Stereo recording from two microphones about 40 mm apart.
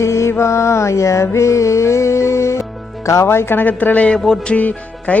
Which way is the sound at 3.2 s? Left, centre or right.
Left.